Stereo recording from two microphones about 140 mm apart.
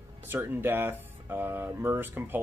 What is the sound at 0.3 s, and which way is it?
Speech, 15° right (ahead or behind).